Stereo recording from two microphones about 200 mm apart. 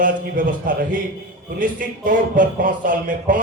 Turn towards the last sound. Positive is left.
turn(degrees=-40)  # may be behind; listen again after turning